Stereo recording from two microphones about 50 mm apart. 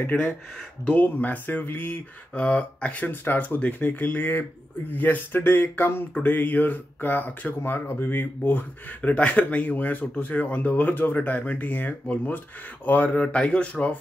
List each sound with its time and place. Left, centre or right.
0.1 s speech: left
3.1 s speech: left
6.2 s speech: left
8.5 s speech: left